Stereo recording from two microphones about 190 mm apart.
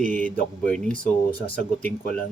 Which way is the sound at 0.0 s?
45° right (ahead or behind).